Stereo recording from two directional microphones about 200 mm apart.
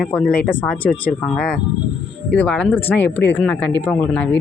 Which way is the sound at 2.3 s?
10° left (ahead or behind).